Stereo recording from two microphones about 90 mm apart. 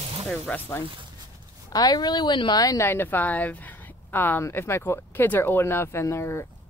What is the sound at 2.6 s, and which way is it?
Speech, 40° left (ahead or behind).